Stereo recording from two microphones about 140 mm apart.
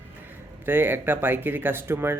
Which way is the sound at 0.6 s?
15° right (ahead or behind).